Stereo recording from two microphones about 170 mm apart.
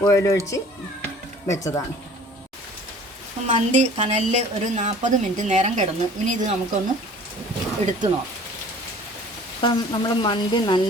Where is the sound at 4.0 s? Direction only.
40° right (ahead or behind).